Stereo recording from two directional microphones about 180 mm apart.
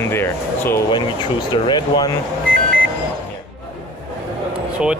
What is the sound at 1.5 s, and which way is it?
Speech, 25° left (ahead or behind).